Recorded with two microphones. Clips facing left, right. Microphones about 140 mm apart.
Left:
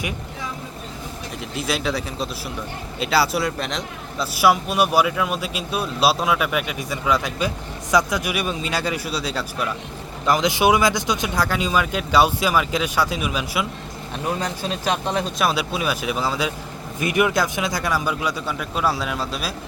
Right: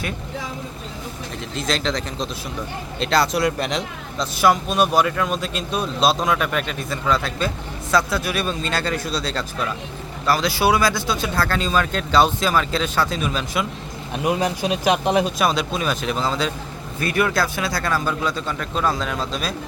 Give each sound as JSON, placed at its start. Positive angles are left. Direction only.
{"t": 1.5, "sound": "speech", "side_deg": 10}
{"t": 14.3, "sound": "speech", "side_deg": -15}
{"t": 15.4, "sound": "speech", "side_deg": 5}